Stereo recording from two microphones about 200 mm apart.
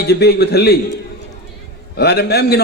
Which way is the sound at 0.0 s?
55° left (ahead or behind).